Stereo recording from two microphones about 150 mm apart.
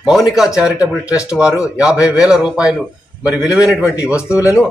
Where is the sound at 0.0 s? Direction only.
Centre (ahead or behind).